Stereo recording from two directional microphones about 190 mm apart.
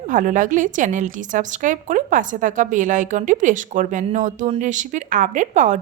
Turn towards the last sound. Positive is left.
turn(degrees=-40)  # may be behind; listen again after turning